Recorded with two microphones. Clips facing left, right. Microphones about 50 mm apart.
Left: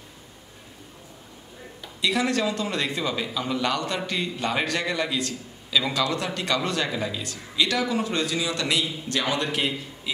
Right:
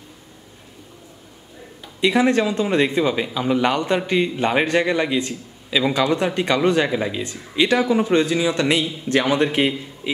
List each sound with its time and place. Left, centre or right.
2.0 s a man's voice: right